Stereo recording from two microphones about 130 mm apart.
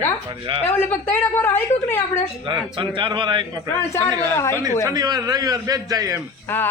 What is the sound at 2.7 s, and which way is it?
Speech, 40° right (ahead or behind).